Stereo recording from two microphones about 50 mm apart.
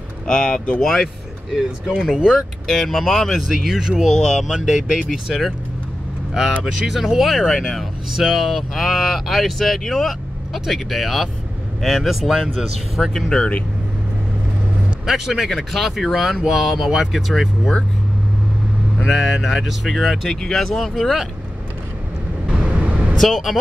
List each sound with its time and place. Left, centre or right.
0.3 s speech: centre
1.0 s speech: centre
2.3 s speech: centre
3.4 s speech: centre
4.1 s speech: centre
4.8 s speech: centre
6.6 s speech: centre
8.2 s speech: centre
15.0 s speech: centre
18.9 s speech: centre
22.5 s vehicle: centre
23.1 s speech: centre